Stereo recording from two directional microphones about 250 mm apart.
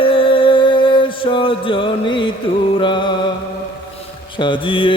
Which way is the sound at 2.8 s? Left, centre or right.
Centre.